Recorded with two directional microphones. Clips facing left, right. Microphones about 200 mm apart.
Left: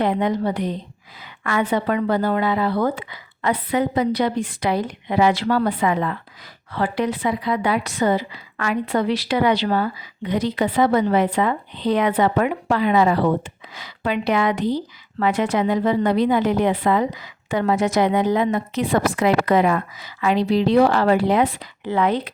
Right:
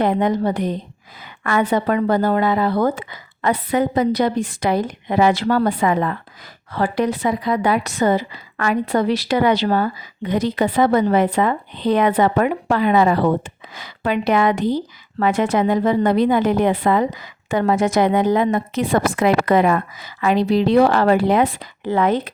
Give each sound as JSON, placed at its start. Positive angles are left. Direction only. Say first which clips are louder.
{"t": 0.0, "sound": "a woman's voice", "louder": "right 2 dB", "side_deg": -45}